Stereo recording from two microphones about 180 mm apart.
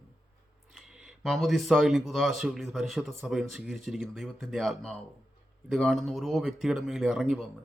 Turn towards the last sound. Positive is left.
turn(degrees=0)  # may be behind; listen again after turning